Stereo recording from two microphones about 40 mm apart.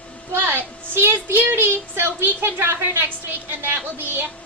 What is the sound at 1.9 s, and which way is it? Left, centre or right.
A woman's voice, right.